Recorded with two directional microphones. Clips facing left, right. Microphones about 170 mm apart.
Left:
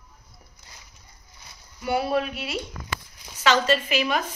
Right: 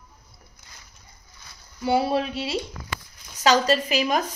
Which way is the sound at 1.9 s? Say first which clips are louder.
Right 2 dB; 30° right (ahead or behind).